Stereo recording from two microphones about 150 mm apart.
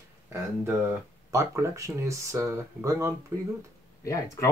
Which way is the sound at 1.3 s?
20° right (ahead or behind).